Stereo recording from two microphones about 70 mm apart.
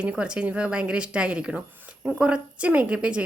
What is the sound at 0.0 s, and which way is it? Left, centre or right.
A woman's voice, centre.